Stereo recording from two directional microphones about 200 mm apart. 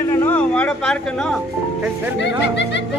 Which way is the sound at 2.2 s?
60° left (ahead or behind).